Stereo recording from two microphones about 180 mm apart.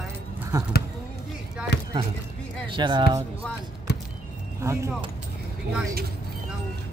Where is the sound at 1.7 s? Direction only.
70° left (ahead or behind).